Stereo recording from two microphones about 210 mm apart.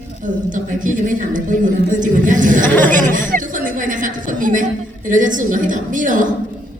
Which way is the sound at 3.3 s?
40° right (ahead or behind).